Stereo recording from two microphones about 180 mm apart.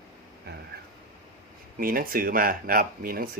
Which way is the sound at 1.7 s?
50° right (ahead or behind).